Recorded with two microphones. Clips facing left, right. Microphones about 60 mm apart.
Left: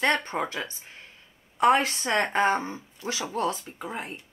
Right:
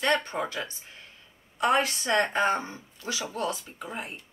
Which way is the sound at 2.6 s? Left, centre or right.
Left.